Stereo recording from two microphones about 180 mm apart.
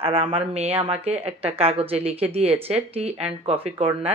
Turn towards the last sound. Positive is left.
turn(degrees=-35)  # may be behind; listen again after turning